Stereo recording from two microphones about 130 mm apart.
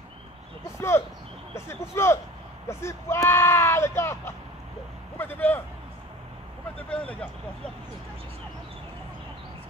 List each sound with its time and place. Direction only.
0.7 s speech: 20° left (ahead or behind)
6.8 s speech: 10° left (ahead or behind)